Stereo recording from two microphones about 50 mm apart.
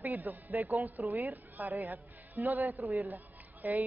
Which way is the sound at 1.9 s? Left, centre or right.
Right.